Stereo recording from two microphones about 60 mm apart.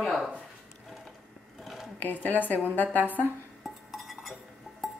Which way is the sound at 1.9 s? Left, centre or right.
Left.